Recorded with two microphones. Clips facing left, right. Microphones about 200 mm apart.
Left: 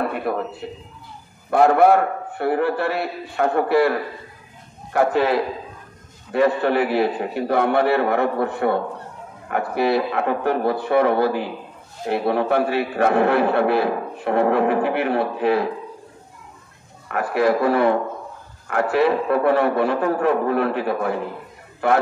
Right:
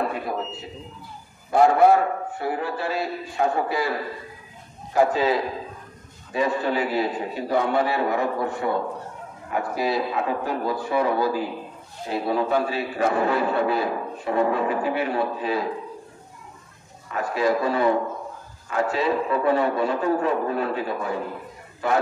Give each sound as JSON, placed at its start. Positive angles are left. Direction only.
{"t": 0.1, "sound": "a man's voice", "side_deg": 60}
{"t": 4.9, "sound": "a man's voice", "side_deg": 60}
{"t": 17.1, "sound": "a man's voice", "side_deg": 65}